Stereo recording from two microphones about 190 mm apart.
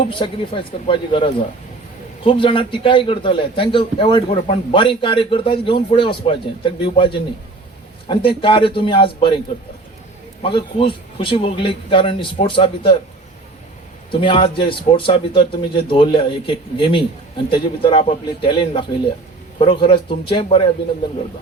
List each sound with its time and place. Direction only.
0.1 s a man's voice: 25° left (ahead or behind)
10.4 s a man's voice: 25° left (ahead or behind)
14.1 s a man's voice: 25° left (ahead or behind)